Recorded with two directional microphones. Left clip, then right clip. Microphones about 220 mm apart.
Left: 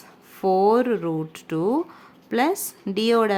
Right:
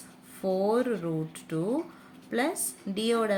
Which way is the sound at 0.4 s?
45° left (ahead or behind).